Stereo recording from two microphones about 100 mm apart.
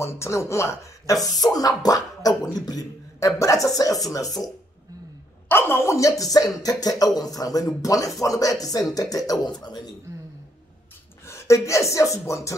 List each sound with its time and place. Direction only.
0.0 s speech: 30° left (ahead or behind)
5.5 s speech: 25° left (ahead or behind); by 9.9 s 45° left (ahead or behind)
11.2 s speech: 30° left (ahead or behind)